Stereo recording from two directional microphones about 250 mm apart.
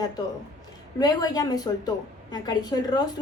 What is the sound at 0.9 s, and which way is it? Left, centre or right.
A woman's voice, centre.